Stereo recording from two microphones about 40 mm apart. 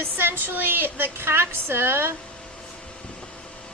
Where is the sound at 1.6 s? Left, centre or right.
Right.